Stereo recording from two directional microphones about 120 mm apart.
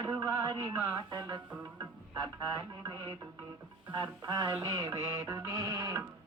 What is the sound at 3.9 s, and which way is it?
Mantra, 35° right (ahead or behind).